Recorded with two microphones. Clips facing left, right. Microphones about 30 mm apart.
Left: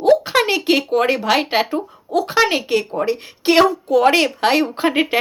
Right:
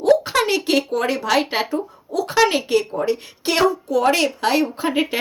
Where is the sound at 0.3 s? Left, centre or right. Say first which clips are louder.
Left 2 dB; left.